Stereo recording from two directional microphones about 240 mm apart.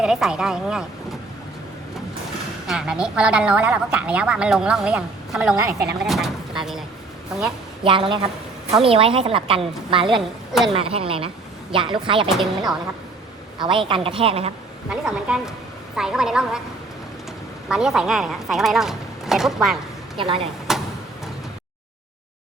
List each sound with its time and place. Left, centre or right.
0.0 s a woman's voice: centre
2.6 s a woman's voice: centre
7.9 s a woman's voice: right
13.6 s a woman's voice: right
14.8 s a woman's voice: centre
17.7 s a woman's voice: centre
20.1 s a woman's voice: right
20.7 s a sound: centre